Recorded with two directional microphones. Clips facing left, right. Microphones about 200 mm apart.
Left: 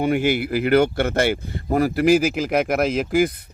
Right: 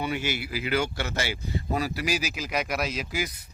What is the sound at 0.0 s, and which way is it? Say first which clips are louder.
A man's voice: left 10 dB; 50° left (ahead or behind).